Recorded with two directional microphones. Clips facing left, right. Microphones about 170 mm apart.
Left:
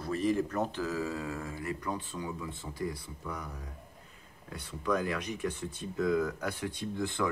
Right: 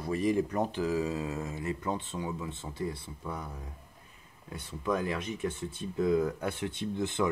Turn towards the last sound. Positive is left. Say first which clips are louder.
# right 2 dB
turn(degrees=-20)  # may be behind; listen again after turning